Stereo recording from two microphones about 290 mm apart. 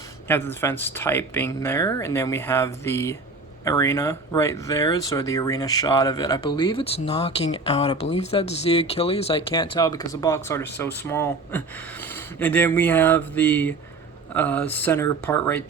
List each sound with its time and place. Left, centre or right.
0.3 s speech: centre